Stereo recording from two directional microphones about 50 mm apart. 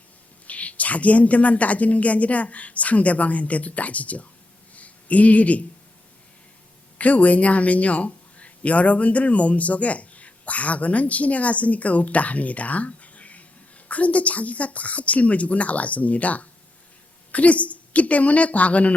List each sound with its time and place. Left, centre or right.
0.4 s speech: left
4.7 s a sound: left
7.0 s speech: left